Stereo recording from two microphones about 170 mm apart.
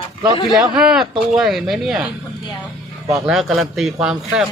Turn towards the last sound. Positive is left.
turn(degrees=-5)  # may be behind; listen again after turning